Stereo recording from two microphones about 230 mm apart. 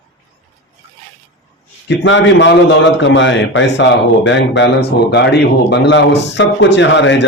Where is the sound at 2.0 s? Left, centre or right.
Left.